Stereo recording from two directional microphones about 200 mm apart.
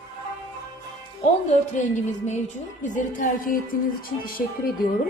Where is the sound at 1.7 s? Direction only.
35° left (ahead or behind).